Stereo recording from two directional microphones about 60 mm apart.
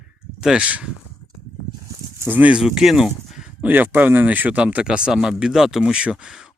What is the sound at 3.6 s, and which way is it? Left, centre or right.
Speech, right.